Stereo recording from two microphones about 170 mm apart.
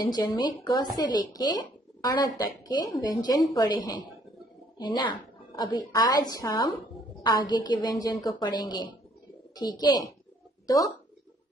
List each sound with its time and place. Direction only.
0.0 s a woman's voice: 25° left (ahead or behind)